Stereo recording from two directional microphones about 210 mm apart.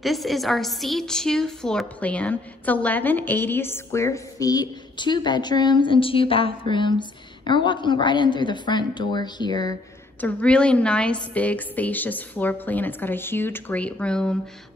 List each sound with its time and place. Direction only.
0.0 s a woman's voice: centre (ahead or behind); by 9.8 s 20° left (ahead or behind)
10.2 s a woman's voice: 5° left (ahead or behind)